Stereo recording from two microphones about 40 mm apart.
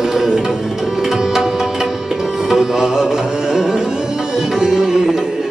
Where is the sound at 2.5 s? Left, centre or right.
Centre.